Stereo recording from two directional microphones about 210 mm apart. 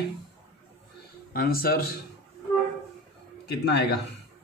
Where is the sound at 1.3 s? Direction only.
45° left (ahead or behind).